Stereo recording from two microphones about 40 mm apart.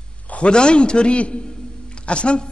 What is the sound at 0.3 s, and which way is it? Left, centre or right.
A man's voice, left.